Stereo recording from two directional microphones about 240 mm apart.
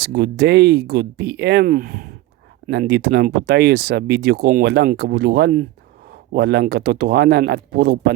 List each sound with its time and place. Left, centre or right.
0.0 s speech: right